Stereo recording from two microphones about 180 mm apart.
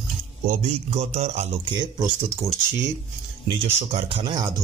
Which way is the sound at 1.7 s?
20° right (ahead or behind).